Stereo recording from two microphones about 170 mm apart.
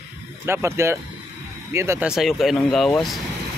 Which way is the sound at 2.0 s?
Centre (ahead or behind).